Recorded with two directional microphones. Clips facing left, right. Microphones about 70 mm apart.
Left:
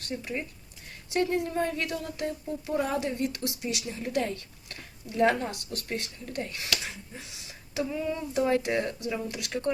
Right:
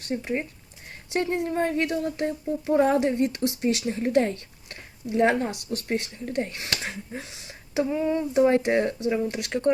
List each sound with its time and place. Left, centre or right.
0.0 s speech: right